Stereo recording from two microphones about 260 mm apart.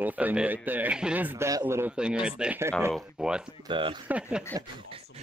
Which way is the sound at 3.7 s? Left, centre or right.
Centre.